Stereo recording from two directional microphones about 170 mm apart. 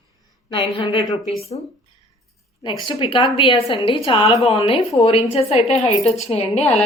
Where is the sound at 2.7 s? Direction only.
25° left (ahead or behind).